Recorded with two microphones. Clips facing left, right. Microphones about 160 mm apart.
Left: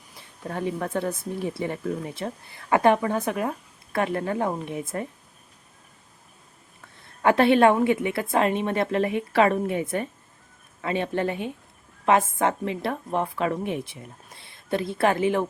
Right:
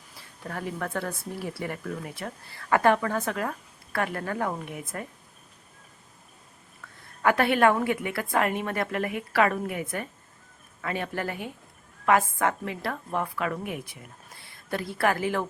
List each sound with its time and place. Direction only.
0.2 s a woman's voice: 20° left (ahead or behind)
6.8 s a woman's voice: 25° left (ahead or behind)